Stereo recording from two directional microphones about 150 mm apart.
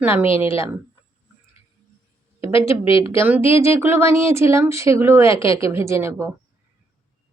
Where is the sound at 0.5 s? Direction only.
20° right (ahead or behind).